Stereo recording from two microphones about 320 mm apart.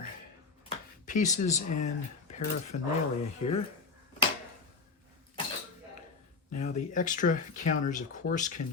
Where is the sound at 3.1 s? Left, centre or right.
Centre.